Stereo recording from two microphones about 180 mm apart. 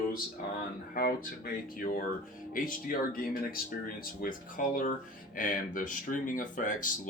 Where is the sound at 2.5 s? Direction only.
50° left (ahead or behind).